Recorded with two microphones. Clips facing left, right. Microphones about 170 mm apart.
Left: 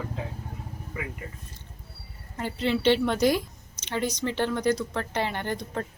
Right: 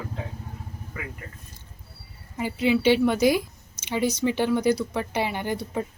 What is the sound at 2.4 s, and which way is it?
Speech, 10° right (ahead or behind).